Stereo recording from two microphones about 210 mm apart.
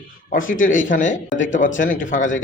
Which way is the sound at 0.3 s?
40° left (ahead or behind).